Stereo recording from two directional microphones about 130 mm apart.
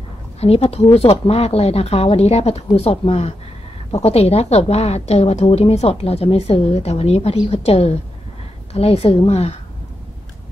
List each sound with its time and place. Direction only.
0.4 s a woman's voice: 50° left (ahead or behind)